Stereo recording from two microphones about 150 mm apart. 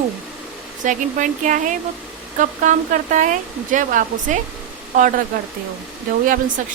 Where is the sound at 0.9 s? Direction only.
60° right (ahead or behind).